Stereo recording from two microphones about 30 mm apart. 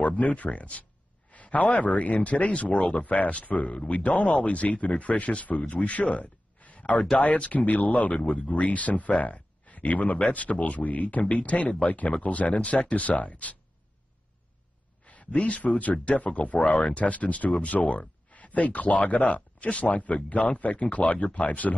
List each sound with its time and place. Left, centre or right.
0.0 s speech: left
3.7 s speech: left
15.0 s speech: left